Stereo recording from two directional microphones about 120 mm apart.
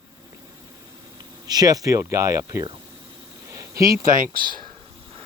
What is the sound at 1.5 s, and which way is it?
Speech, 30° right (ahead or behind).